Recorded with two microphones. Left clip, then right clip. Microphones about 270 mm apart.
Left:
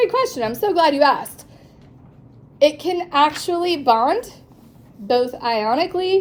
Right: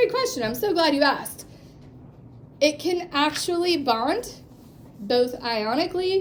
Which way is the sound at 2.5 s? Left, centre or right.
Centre.